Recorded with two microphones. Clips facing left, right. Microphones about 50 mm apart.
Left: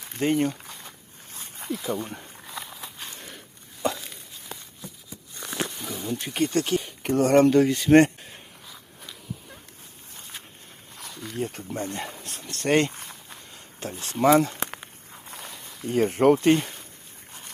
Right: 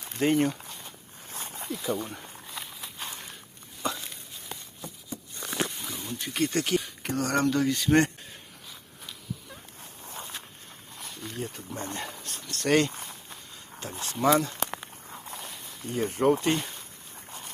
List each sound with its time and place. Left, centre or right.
0.2 s speech: centre
1.7 s speech: centre
5.9 s wild animals: left
6.4 s speech: centre
7.0 s speech: left
11.3 s speech: left
11.9 s speech: left
12.6 s speech: left
14.0 s speech: left
15.9 s speech: left